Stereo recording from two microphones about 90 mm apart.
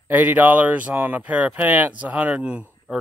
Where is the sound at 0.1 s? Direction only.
20° right (ahead or behind).